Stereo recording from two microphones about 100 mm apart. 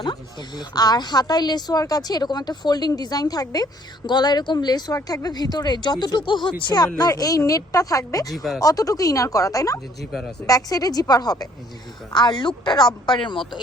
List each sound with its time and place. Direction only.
0.0 s speech: 45° left (ahead or behind)
10.1 s speech: centre (ahead or behind)
10.4 s speech: 35° left (ahead or behind)
12.7 s speech: 5° left (ahead or behind)